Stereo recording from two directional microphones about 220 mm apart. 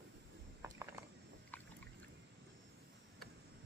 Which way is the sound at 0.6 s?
10° right (ahead or behind).